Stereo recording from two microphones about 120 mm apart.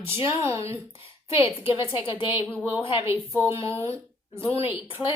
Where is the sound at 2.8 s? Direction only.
45° left (ahead or behind).